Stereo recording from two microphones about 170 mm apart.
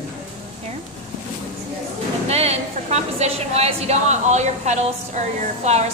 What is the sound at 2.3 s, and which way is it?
A woman's voice, 40° right (ahead or behind).